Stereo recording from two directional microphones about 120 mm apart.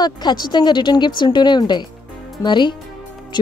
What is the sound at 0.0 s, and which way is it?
Speech, 35° left (ahead or behind).